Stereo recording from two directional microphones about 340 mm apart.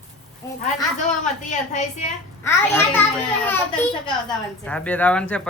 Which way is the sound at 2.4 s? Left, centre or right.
Centre.